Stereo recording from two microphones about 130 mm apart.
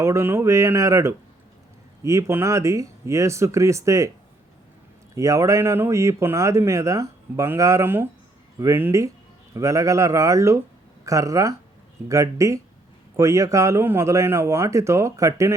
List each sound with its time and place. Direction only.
0.0 s speech: 20° right (ahead or behind)
5.1 s speech: 25° right (ahead or behind)